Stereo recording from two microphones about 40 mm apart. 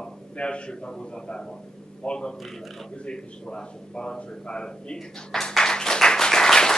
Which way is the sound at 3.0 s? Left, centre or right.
Left.